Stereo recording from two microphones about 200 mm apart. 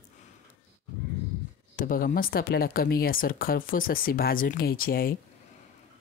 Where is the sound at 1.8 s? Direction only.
45° left (ahead or behind).